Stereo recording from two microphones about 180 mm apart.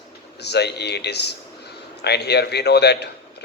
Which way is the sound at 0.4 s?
65° left (ahead or behind).